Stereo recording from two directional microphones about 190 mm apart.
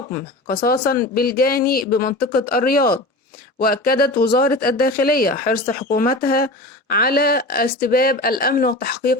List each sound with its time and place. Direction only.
0.1 s speech: 50° left (ahead or behind)